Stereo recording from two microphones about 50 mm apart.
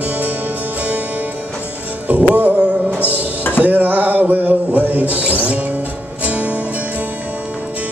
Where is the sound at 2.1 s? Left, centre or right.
Right.